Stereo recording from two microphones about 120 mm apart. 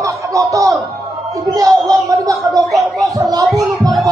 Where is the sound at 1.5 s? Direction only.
30° right (ahead or behind).